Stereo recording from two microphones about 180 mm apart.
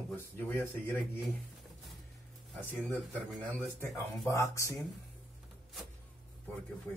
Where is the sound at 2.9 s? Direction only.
Centre (ahead or behind).